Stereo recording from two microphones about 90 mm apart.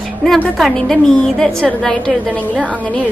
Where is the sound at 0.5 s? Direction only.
5° left (ahead or behind).